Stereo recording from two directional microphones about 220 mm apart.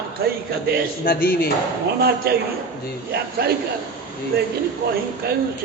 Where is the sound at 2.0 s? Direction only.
45° right (ahead or behind).